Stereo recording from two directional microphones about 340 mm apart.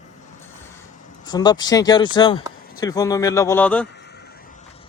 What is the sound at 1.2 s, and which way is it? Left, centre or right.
Speech, centre.